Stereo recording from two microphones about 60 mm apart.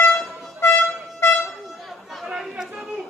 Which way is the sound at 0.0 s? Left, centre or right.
Left.